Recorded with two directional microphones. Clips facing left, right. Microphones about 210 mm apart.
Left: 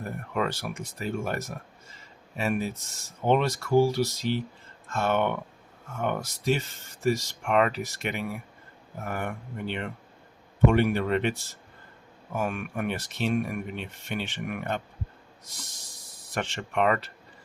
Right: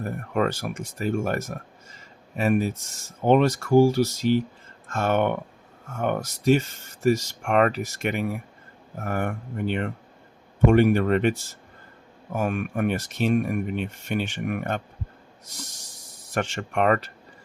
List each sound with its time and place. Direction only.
0.3 s speech: 45° right (ahead or behind)
16.3 s speech: 45° right (ahead or behind)